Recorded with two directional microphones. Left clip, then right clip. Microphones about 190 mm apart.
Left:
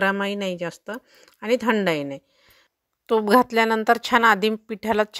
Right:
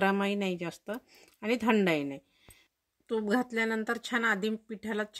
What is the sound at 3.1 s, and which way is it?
A woman's voice, 45° left (ahead or behind).